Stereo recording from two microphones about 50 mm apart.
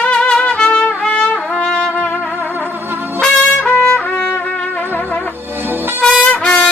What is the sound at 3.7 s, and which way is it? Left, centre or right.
Trumpet, left.